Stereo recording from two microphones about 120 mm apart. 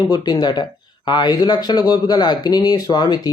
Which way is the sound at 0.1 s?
35° left (ahead or behind).